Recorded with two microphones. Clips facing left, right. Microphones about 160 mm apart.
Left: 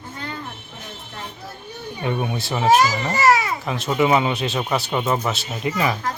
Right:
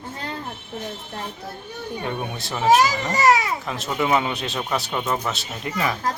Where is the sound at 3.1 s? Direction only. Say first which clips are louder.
Left 1 dB; 15° right (ahead or behind).